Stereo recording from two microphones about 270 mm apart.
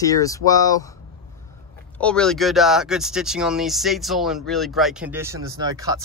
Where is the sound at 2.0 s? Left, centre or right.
Centre.